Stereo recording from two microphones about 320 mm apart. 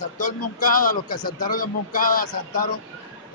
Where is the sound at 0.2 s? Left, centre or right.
Left.